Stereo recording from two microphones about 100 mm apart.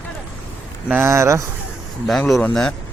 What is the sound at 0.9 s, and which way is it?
Speech, 25° right (ahead or behind).